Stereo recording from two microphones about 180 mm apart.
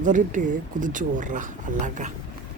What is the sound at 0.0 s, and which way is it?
Speech, 45° right (ahead or behind).